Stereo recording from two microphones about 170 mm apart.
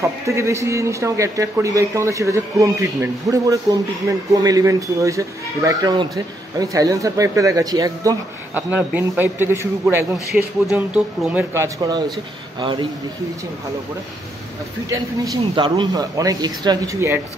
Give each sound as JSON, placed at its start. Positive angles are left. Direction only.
{"t": 0.0, "sound": "a man's voice", "side_deg": -15}
{"t": 8.5, "sound": "speech", "side_deg": -10}
{"t": 10.1, "sound": "a man's voice", "side_deg": -5}
{"t": 15.5, "sound": "a man's voice", "side_deg": -25}